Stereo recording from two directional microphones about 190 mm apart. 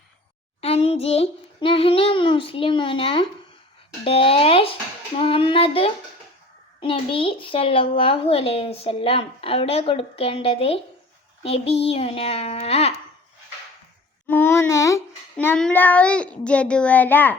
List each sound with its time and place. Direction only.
0.6 s a sound: 30° left (ahead or behind)
4.0 s a woman's voice: 30° left (ahead or behind)
14.3 s child singing: 10° left (ahead or behind)